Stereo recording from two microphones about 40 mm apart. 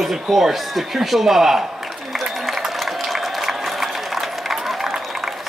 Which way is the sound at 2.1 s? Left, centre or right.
Centre.